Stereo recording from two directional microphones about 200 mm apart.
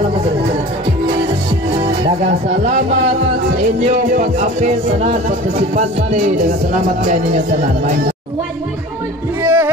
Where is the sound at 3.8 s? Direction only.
40° right (ahead or behind).